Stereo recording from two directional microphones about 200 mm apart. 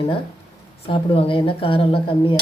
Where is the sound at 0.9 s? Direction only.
25° left (ahead or behind).